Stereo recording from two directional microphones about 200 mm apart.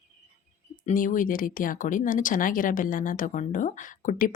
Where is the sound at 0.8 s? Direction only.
40° left (ahead or behind).